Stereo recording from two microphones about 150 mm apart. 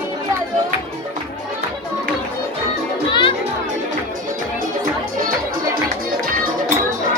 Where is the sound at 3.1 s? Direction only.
30° left (ahead or behind).